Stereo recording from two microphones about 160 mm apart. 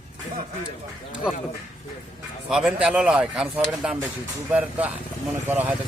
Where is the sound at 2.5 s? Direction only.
5° right (ahead or behind).